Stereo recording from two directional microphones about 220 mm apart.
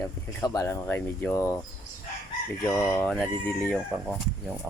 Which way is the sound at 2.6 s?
5° left (ahead or behind).